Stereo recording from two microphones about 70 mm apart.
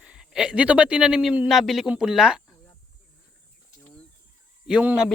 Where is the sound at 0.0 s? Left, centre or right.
Centre.